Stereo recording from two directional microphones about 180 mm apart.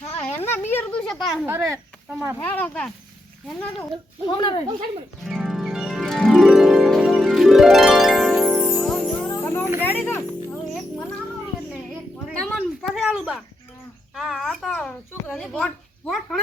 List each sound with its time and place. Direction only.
0.2 s a sound: 10° left (ahead or behind)
0.7 s speech: 10° left (ahead or behind)
1.5 s a child's voice: 15° right (ahead or behind)
2.4 s speech: 10° left (ahead or behind)
4.3 s speech: 25° left (ahead or behind)
5.2 s harp: centre (ahead or behind)
9.8 s music: 10° left (ahead or behind)
12.5 s a sound: centre (ahead or behind)
14.2 s a child's voice: 5° right (ahead or behind)